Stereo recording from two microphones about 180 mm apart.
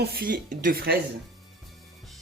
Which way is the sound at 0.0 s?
55° right (ahead or behind).